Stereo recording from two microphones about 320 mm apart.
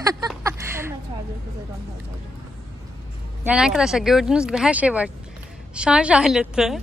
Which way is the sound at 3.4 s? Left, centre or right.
Centre.